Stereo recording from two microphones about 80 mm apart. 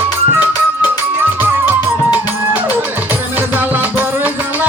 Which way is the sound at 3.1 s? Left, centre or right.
Right.